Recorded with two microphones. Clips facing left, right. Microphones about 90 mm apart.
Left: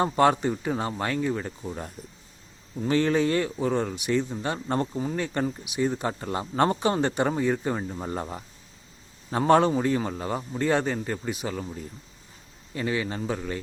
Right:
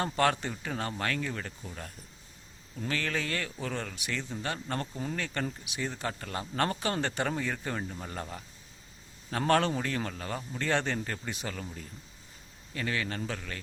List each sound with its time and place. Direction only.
0.0 s speech: 20° left (ahead or behind)
9.5 s a man's voice: 15° left (ahead or behind)